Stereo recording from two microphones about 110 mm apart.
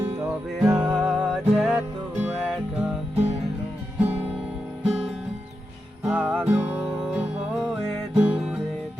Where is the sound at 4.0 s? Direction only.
15° right (ahead or behind).